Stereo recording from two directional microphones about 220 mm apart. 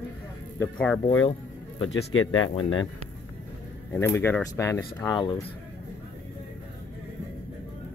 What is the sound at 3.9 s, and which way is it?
Speech, 10° left (ahead or behind).